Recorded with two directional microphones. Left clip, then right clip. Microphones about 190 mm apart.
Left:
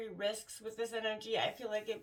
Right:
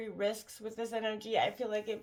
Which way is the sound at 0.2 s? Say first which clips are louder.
Right 4 dB; 35° right (ahead or behind).